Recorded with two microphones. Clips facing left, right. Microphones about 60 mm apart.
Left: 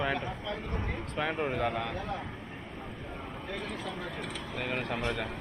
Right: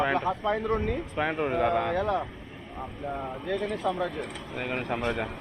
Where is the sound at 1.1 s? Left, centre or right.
Centre.